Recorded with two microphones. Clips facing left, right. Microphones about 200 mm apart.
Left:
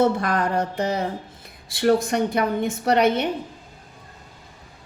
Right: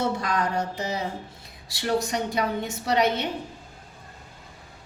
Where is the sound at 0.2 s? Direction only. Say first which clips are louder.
Left 4 dB; 55° left (ahead or behind).